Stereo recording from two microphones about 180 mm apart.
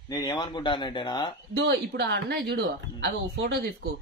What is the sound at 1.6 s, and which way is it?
A woman's voice, 65° right (ahead or behind).